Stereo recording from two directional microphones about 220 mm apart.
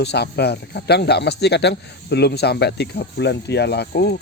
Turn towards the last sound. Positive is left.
turn(degrees=45)  # may be behind; listen again after turning